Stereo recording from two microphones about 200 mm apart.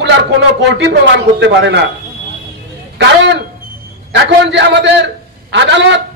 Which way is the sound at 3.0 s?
60° right (ahead or behind).